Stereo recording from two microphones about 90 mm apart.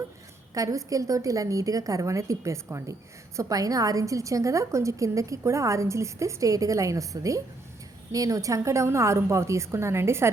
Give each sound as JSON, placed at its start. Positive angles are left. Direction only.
{"t": 0.5, "sound": "a woman's voice", "side_deg": -40}